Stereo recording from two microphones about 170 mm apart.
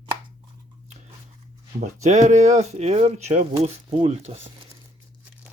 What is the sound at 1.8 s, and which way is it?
Speech, 45° right (ahead or behind).